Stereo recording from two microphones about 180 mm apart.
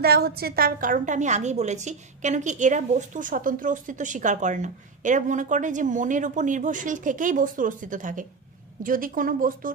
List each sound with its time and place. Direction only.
0.0 s a woman's voice: 60° right (ahead or behind)